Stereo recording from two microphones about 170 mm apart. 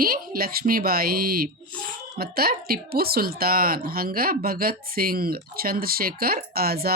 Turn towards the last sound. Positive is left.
turn(degrees=-65)  # may be behind; listen again after turning